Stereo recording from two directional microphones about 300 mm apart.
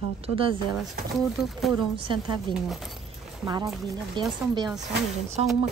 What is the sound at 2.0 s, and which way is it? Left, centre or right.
Speech, centre.